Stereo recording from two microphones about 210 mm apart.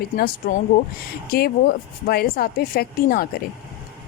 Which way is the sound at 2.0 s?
45° left (ahead or behind).